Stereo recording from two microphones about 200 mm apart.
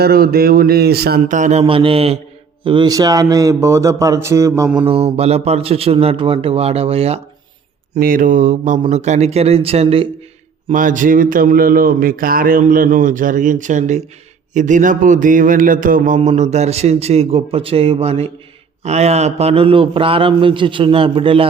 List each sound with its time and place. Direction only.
0.0 s speech: 50° right (ahead or behind); by 4.7 s 15° right (ahead or behind)
4.9 s a man's voice: 30° right (ahead or behind)
7.9 s a man's voice: 45° right (ahead or behind); by 10.1 s 30° right (ahead or behind)
10.7 s a man's voice: 40° right (ahead or behind)